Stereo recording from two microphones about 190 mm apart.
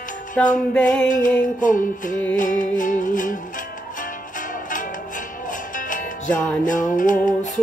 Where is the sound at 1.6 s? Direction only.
45° left (ahead or behind).